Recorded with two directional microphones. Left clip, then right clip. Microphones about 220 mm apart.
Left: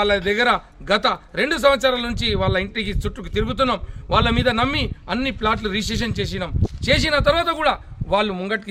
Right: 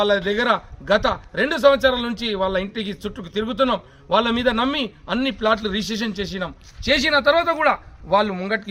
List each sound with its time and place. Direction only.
0.0 s a man's voice: 20° left (ahead or behind)